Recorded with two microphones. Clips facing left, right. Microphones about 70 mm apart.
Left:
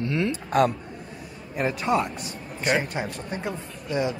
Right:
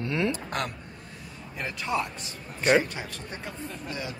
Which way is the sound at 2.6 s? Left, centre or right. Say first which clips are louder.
Right 2 dB; centre.